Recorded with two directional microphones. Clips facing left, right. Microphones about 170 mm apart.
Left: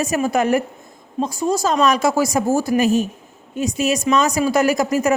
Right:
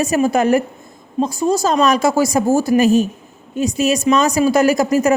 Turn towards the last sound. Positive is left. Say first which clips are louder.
# right 3 dB
turn(degrees=-35)  # may be behind; listen again after turning